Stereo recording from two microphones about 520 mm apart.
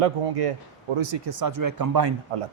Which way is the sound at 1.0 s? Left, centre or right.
Right.